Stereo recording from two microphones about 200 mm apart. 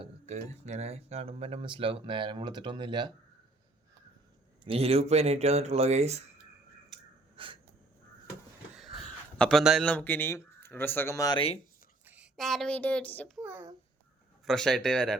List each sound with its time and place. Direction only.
0.0 s music: 35° right (ahead or behind)
0.6 s speech: 35° right (ahead or behind)
4.6 s speech: 30° right (ahead or behind)
7.3 s crow: 25° right (ahead or behind)
9.4 s a man's voice: centre (ahead or behind); by 11.6 s 30° left (ahead or behind)
12.0 s a sound: 5° right (ahead or behind)
14.4 s speech: centre (ahead or behind)